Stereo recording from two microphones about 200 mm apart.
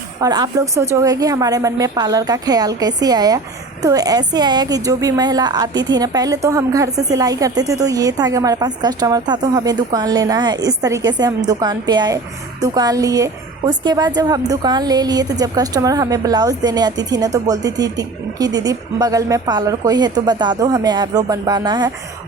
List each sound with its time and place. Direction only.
0.2 s a woman's voice: 20° right (ahead or behind)